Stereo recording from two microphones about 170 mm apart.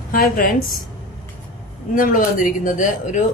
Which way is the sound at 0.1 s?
60° left (ahead or behind).